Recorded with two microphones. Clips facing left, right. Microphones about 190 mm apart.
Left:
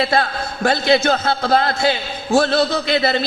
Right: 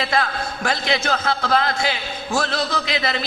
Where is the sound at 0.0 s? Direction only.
35° left (ahead or behind).